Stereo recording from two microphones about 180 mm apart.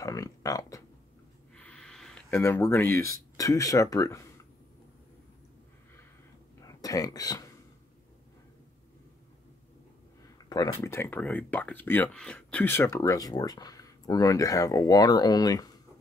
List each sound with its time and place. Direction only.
0.0 s speech: 20° left (ahead or behind)
1.5 s speech: 5° left (ahead or behind)
6.6 s speech: 20° left (ahead or behind)
10.5 s speech: 20° left (ahead or behind)